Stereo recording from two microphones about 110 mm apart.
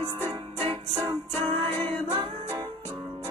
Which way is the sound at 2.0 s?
80° right.